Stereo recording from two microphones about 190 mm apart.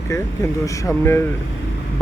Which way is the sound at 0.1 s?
15° left (ahead or behind).